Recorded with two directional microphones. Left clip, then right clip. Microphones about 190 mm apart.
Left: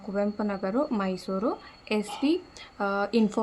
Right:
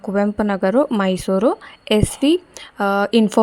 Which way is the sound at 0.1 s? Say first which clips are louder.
Right 10 dB; 45° right (ahead or behind).